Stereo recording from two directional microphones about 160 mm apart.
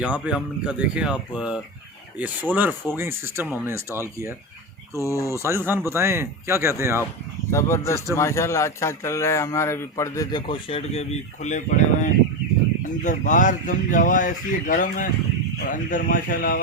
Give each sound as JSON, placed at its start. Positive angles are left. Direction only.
{"t": 0.0, "sound": "speech", "side_deg": -5}
{"t": 4.9, "sound": "speech", "side_deg": 20}
{"t": 5.3, "sound": "speech", "side_deg": -15}
{"t": 7.5, "sound": "a man's voice", "side_deg": 15}